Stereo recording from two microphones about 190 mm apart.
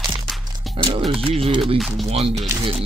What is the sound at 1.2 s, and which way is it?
Speech, 30° right (ahead or behind).